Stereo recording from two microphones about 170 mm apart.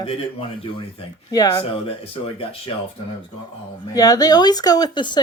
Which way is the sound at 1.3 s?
20° left (ahead or behind).